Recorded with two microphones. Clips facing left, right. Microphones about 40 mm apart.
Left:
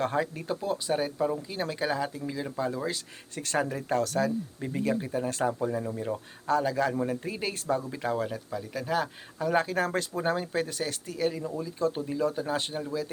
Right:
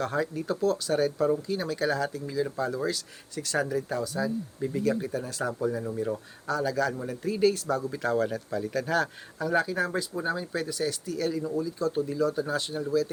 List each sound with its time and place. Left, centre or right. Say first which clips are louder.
0.0 s speech: even; left
1.5 s speech: right 2 dB; left
3.3 s speech: right 1 dB; left
4.0 s speech: left 3 dB; left
4.6 s speech: right 3 dB; left
8.0 s speech: right 3 dB; centre
9.4 s speech: even; left
10.2 s speech: left 3 dB; left